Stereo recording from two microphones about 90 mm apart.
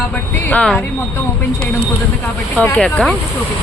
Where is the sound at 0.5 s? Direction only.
10° left (ahead or behind).